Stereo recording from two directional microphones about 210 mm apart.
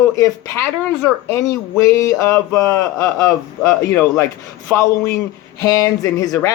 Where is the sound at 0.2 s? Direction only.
15° left (ahead or behind).